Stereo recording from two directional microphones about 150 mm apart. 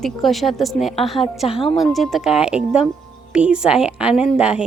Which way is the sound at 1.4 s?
40° left (ahead or behind).